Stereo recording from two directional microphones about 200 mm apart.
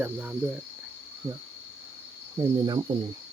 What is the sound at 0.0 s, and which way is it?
Speech, 5° right (ahead or behind).